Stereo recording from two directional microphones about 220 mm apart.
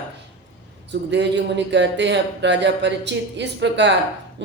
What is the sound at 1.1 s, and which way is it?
Speech, 55° right (ahead or behind).